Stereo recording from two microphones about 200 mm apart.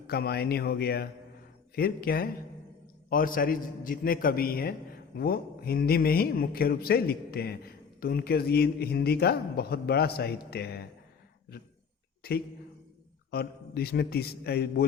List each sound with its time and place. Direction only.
0.1 s speech: 50° left (ahead or behind)
12.2 s speech: 50° left (ahead or behind)